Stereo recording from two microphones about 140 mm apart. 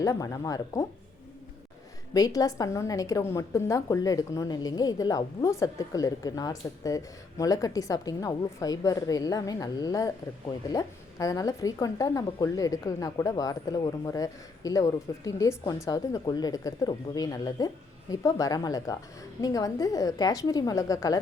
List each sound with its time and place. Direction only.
0.0 s a woman's voice: 20° left (ahead or behind)
2.1 s a woman's voice: 25° left (ahead or behind)